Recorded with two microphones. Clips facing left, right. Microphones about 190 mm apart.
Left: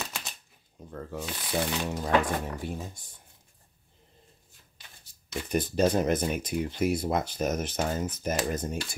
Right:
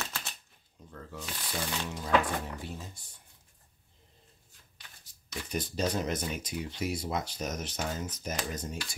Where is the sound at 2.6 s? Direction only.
55° left (ahead or behind).